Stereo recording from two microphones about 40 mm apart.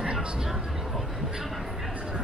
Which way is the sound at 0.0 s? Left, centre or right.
Centre.